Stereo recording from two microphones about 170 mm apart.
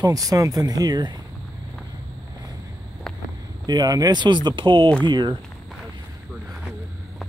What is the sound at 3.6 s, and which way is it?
Speech, 25° right (ahead or behind).